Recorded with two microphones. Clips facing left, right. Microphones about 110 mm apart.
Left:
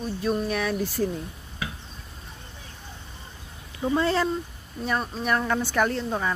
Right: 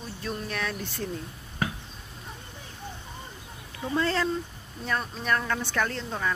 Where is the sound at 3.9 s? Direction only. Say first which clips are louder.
Left 2 dB; 15° left (ahead or behind).